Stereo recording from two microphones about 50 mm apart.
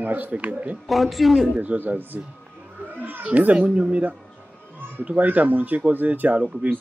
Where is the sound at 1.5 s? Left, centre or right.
Right.